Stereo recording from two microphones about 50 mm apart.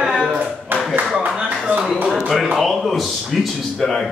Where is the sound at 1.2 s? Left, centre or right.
Right.